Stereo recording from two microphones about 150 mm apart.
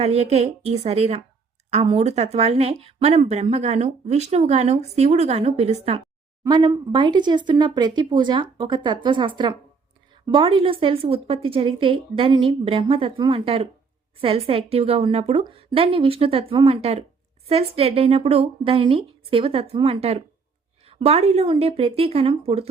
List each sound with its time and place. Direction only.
0.0 s speech: 45° right (ahead or behind)
6.5 s a woman's voice: 30° right (ahead or behind)